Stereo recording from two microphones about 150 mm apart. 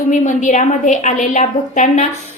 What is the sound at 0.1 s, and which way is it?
A woman's voice, 55° left (ahead or behind).